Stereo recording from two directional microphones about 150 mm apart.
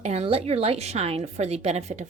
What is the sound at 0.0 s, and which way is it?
A woman's voice, 45° right (ahead or behind).